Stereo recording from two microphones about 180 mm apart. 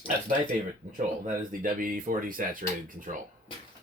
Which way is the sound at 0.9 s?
45° right (ahead or behind).